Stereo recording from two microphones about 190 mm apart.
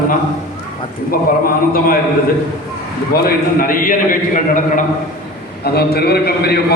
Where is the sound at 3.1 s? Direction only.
50° left (ahead or behind).